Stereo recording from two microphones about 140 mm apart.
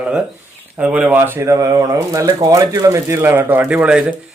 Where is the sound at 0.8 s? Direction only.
10° right (ahead or behind).